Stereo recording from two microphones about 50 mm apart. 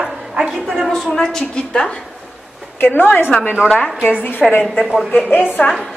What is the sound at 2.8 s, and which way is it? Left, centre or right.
A woman's voice, left.